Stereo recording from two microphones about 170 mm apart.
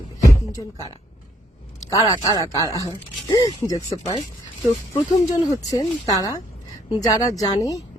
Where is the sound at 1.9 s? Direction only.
20° left (ahead or behind).